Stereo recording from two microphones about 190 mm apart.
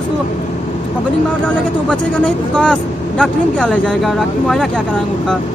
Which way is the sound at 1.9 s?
5° left (ahead or behind).